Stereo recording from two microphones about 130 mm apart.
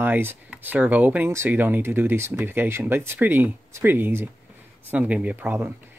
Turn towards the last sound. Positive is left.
turn(degrees=-10)  # may be behind; listen again after turning